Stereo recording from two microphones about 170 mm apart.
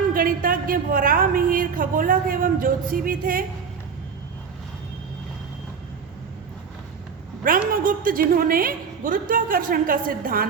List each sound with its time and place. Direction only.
0.1 s a woman's voice: 55° right (ahead or behind)
7.7 s a woman's voice: 55° right (ahead or behind)